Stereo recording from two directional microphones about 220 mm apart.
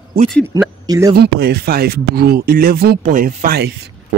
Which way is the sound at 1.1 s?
45° right (ahead or behind).